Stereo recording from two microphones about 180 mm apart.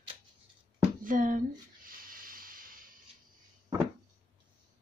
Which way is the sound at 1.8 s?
50° right (ahead or behind).